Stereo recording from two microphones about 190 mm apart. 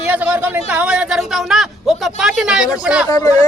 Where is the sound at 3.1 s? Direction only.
20° left (ahead or behind).